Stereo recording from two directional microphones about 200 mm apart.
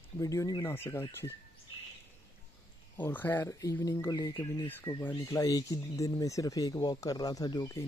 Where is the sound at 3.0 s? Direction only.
10° left (ahead or behind).